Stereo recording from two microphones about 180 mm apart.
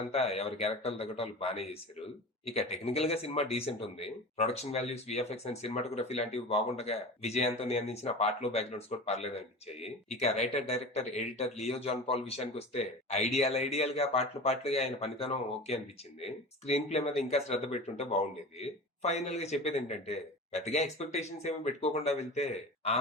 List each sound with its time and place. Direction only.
0.1 s speech: 35° left (ahead or behind)